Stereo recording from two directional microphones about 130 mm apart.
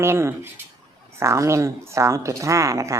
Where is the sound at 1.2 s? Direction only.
20° right (ahead or behind).